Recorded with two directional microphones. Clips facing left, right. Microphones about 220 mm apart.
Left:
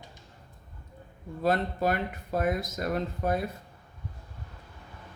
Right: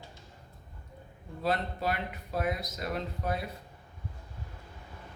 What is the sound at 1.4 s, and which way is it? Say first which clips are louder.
Speech: left 5 dB; 50° left (ahead or behind).